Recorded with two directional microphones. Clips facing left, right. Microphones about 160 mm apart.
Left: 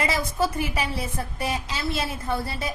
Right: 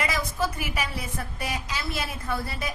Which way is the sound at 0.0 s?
30° left (ahead or behind).